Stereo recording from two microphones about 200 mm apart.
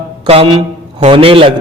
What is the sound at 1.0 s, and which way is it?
Speech, 30° right (ahead or behind).